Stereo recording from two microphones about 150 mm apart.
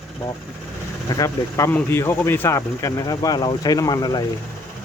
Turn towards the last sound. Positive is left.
turn(degrees=25)  # may be behind; listen again after turning